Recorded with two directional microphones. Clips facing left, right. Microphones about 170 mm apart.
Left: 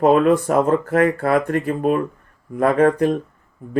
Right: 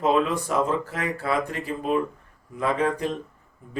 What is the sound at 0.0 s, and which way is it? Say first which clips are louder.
Speech: left 8 dB; 55° left (ahead or behind).